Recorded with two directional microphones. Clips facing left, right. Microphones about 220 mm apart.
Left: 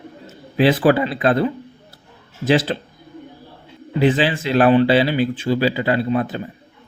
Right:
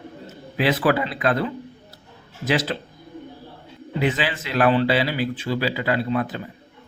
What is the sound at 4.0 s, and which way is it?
Speech, 30° left (ahead or behind).